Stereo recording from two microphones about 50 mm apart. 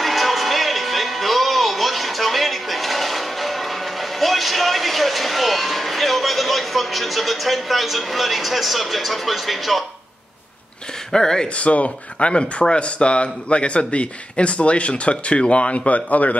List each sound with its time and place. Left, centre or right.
0.0 s music: centre
11.1 s speech: centre
11.5 s speech: left